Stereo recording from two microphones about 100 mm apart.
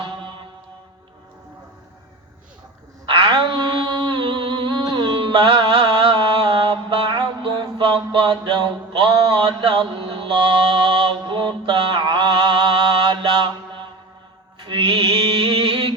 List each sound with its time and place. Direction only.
0.0 s mantra: 55° right (ahead or behind)
3.1 s a sound: 55° right (ahead or behind); by 5.3 s 40° right (ahead or behind)
5.3 s mantra: 55° right (ahead or behind)
14.6 s music: 55° right (ahead or behind)